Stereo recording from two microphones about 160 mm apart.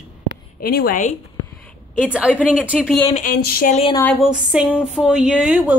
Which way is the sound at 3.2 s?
70° left (ahead or behind).